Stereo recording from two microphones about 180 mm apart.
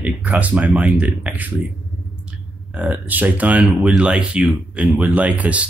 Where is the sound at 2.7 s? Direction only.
10° right (ahead or behind).